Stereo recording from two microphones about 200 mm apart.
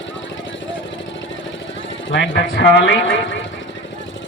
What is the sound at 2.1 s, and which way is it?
Speech, 60° left (ahead or behind).